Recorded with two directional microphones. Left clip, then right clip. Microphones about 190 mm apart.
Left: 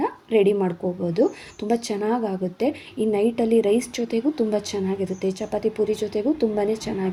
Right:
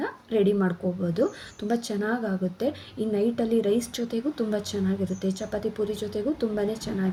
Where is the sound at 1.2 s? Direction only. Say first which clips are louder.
Left 5 dB; 45° left (ahead or behind).